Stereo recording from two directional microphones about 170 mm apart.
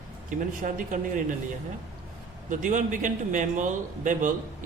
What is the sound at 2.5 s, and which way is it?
Speech, 50° right (ahead or behind).